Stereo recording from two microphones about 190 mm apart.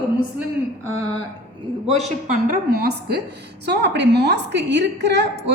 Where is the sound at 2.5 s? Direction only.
60° right (ahead or behind).